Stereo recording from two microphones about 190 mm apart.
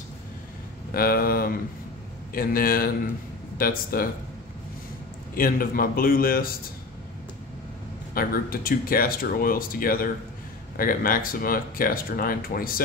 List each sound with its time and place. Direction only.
0.9 s speech: 50° left (ahead or behind)
5.3 s speech: 50° left (ahead or behind)
8.1 s speech: 50° left (ahead or behind)